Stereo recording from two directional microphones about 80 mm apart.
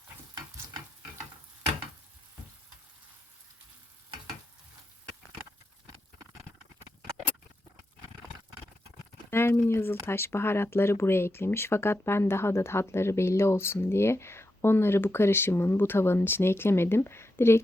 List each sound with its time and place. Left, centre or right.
9.3 s speech: left